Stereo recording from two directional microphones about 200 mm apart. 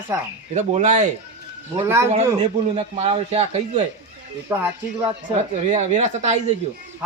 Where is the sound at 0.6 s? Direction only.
35° right (ahead or behind).